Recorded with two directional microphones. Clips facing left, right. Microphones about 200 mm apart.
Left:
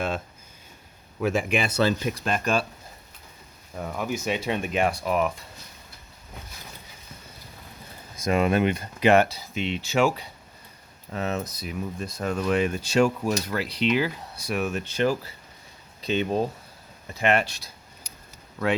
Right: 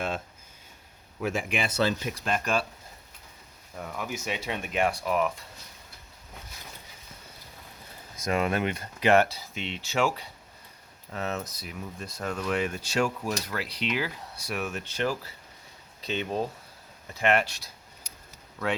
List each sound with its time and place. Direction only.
1.2 s speech: 75° left (ahead or behind)
1.8 s speech: 40° left (ahead or behind)
3.8 s speech: 30° left (ahead or behind)
8.2 s speech: 20° left (ahead or behind)
17.2 s speech: 25° left (ahead or behind)